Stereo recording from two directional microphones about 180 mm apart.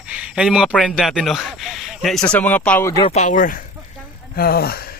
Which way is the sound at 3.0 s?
40° left (ahead or behind).